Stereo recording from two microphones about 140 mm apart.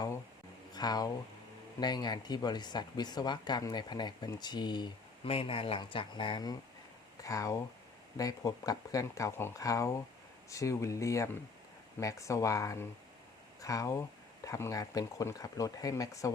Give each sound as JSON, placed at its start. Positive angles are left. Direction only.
{"t": 0.7, "sound": "speech", "side_deg": 30}
{"t": 5.3, "sound": "speech", "side_deg": 40}